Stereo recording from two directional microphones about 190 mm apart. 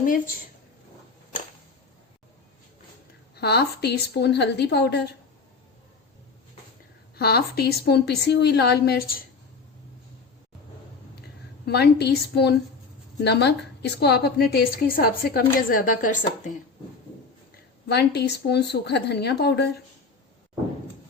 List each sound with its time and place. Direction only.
3.3 s a woman's voice: 60° left (ahead or behind)
7.2 s a woman's voice: 55° left (ahead or behind)
11.6 s a woman's voice: 60° left (ahead or behind)
15.7 s speech: 45° left (ahead or behind)
17.8 s a woman's voice: 60° left (ahead or behind)